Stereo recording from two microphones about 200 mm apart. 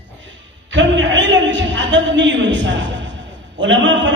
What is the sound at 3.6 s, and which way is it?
Speech, 65° right (ahead or behind).